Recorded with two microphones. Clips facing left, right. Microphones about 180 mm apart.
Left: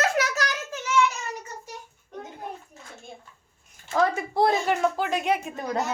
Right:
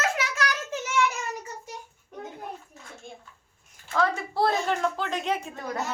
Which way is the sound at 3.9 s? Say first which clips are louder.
Left 3 dB; 20° left (ahead or behind).